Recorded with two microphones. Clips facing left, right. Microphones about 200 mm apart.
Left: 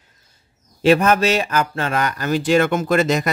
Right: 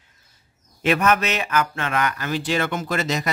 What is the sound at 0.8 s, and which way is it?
A man's voice, 35° left (ahead or behind).